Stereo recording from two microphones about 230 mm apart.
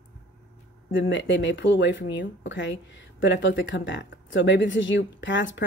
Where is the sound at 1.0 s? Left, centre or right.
Left.